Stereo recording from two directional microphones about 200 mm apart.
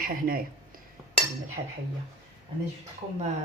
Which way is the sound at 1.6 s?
25° right (ahead or behind).